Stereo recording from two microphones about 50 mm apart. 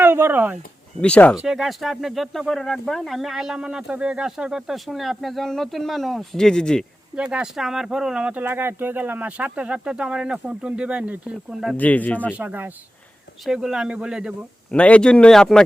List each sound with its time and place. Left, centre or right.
0.0 s a sound: right
1.0 s speech: left
1.4 s speech: centre
6.3 s speech: centre
7.2 s speech: centre
7.5 s speech: centre
8.2 s speech: right
8.4 s speech: right; by 10.3 s centre
10.3 s speech: right
11.8 s speech: left
13.4 s speech: centre
14.7 s speech: left
15.3 s speech: centre